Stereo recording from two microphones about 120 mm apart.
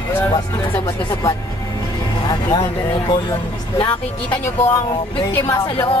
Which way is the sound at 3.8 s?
50° left (ahead or behind).